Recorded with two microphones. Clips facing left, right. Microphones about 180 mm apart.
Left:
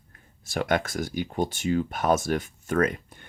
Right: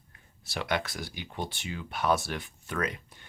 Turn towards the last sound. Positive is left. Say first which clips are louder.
# left 9 dB
turn(degrees=50)  # may be behind; listen again after turning